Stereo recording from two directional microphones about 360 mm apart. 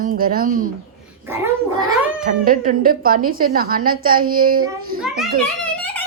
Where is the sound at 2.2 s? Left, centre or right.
Right.